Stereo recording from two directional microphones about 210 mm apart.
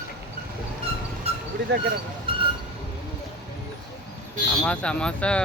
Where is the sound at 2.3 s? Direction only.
25° right (ahead or behind).